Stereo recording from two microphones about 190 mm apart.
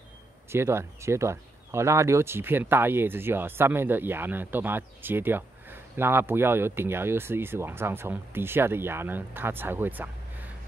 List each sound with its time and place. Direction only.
0.5 s speech: 15° right (ahead or behind)